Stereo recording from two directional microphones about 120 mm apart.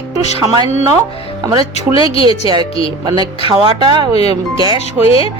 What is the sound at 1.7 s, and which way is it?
Speech, 50° left (ahead or behind).